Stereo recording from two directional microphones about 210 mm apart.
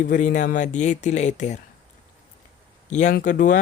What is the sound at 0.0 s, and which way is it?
Speech, 40° left (ahead or behind).